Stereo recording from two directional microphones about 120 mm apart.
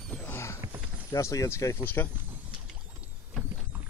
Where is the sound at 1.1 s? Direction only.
25° left (ahead or behind).